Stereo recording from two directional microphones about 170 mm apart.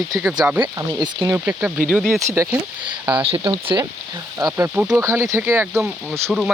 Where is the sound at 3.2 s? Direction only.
30° right (ahead or behind).